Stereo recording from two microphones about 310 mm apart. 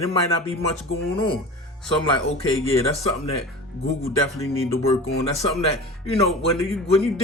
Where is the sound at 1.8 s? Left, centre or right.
Centre.